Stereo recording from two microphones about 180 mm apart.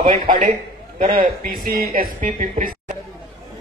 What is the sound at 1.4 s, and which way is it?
Speech, 55° right (ahead or behind).